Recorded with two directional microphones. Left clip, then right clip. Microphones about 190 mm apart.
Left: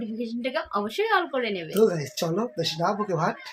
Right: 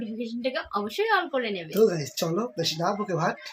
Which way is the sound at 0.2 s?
15° left (ahead or behind).